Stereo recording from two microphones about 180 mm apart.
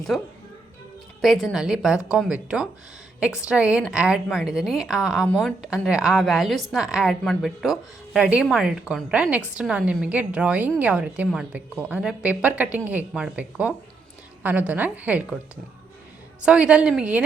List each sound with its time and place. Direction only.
0.1 s a woman's voice: centre (ahead or behind)
16.5 s a woman's voice: 5° right (ahead or behind)